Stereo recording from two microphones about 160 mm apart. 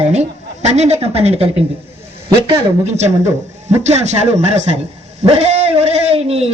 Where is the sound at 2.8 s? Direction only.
45° right (ahead or behind).